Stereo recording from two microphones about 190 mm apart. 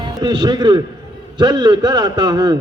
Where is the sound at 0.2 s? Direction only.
25° right (ahead or behind).